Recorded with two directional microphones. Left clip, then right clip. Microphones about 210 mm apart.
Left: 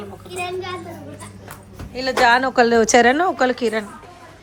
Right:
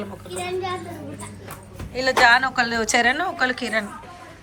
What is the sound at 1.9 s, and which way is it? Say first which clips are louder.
A woman's voice: even; 15° left (ahead or behind).